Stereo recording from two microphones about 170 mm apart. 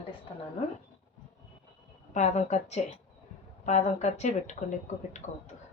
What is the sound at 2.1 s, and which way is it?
Speech, 45° left (ahead or behind).